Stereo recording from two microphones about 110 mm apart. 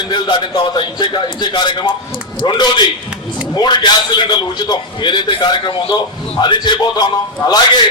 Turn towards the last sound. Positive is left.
turn(degrees=40)  # may be behind; listen again after turning